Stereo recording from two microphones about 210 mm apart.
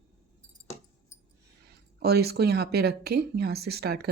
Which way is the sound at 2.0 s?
50° right (ahead or behind).